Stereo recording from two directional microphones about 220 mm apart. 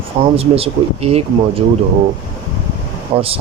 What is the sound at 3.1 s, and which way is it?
Speech, 25° right (ahead or behind).